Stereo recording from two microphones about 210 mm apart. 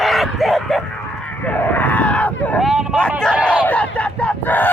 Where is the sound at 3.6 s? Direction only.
5° left (ahead or behind).